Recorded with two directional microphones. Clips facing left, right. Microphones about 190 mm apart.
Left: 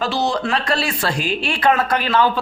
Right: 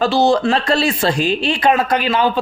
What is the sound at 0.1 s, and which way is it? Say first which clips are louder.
Speech: right 6 dB; 30° right (ahead or behind).